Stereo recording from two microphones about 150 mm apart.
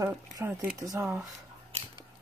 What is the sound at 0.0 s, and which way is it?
Speech, 15° right (ahead or behind).